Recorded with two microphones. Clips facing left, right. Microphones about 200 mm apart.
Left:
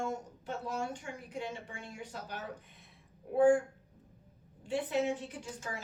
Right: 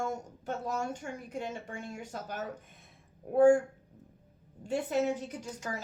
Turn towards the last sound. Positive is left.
turn(degrees=-40)  # may be behind; listen again after turning